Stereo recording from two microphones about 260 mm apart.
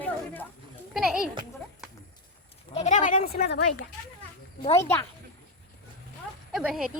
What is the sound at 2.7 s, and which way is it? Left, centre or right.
Speech, left.